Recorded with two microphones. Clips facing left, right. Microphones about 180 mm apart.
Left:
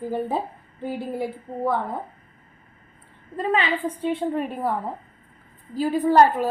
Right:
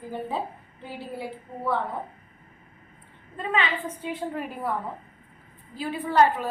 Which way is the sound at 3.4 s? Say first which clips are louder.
Left 4 dB; 35° left (ahead or behind).